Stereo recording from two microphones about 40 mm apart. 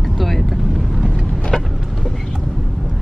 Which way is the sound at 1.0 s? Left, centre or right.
Right.